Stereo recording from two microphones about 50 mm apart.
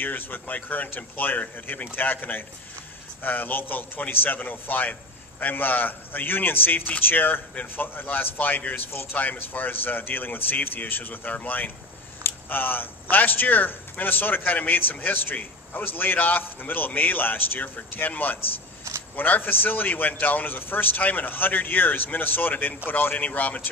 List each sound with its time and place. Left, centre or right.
0.0 s a man's voice: left